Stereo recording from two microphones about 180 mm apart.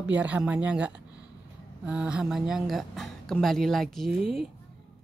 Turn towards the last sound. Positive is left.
turn(degrees=0)  # may be behind; listen again after turning